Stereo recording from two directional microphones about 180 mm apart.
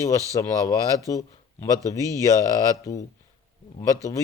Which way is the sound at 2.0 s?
20° right (ahead or behind).